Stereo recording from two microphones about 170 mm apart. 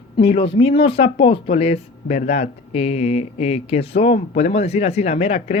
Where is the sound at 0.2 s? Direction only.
35° left (ahead or behind).